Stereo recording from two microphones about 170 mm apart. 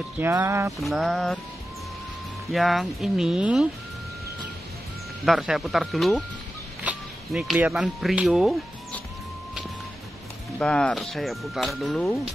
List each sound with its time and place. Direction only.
0.2 s speech: 15° right (ahead or behind)
0.7 s speech: centre (ahead or behind)
2.5 s speech: centre (ahead or behind)
5.2 s speech: centre (ahead or behind)
10.6 s speech: 5° left (ahead or behind)